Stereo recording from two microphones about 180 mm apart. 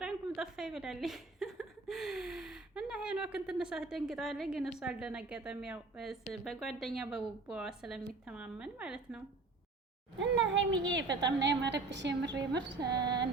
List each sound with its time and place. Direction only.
0.0 s a woman's voice: centre (ahead or behind)
10.2 s a child's voice: 90° right
12.9 s a sound: 25° right (ahead or behind)